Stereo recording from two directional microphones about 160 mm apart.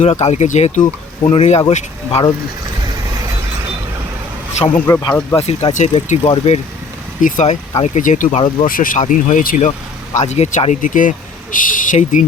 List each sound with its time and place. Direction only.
0.0 s speech: 45° left (ahead or behind)
4.9 s speech: 20° left (ahead or behind)
5.4 s speech: 40° left (ahead or behind)
7.2 s speech: 55° left (ahead or behind)
10.2 s speech: 45° left (ahead or behind)